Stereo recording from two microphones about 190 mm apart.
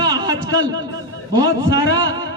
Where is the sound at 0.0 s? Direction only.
20° right (ahead or behind).